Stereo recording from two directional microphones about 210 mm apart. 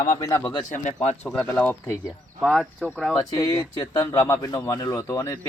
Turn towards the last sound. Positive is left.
turn(degrees=10)  # may be behind; listen again after turning